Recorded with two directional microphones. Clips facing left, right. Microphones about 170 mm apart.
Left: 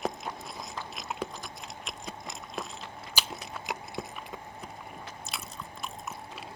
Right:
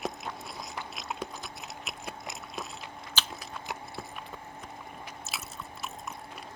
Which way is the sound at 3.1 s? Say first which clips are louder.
Left 1 dB; 15° left (ahead or behind).